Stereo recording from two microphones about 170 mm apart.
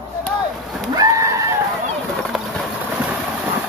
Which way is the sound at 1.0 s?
20° right (ahead or behind).